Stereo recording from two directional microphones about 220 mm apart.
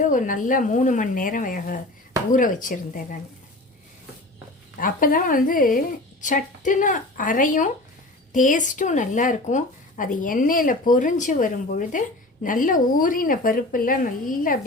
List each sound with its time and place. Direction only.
0.0 s speech: 35° left (ahead or behind)
4.8 s speech: 40° left (ahead or behind)